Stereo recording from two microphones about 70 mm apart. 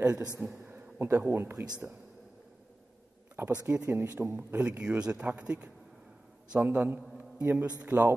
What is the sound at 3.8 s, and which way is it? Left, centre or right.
Speech, right.